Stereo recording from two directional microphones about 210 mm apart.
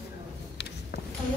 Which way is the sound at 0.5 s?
55° left (ahead or behind).